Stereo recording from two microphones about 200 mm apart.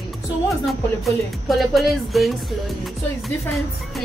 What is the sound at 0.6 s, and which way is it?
Music, centre (ahead or behind).